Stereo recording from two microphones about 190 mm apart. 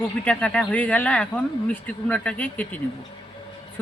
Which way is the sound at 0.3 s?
5° left (ahead or behind).